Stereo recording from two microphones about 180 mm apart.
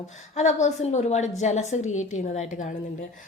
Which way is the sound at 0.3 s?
40° left (ahead or behind).